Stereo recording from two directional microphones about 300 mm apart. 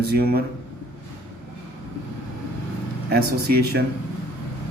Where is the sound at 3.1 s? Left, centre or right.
Right.